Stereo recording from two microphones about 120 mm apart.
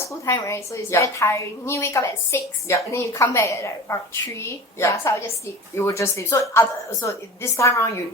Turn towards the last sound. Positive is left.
turn(degrees=25)  # may be behind; listen again after turning